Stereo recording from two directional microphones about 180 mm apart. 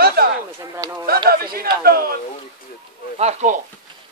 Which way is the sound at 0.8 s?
20° right (ahead or behind).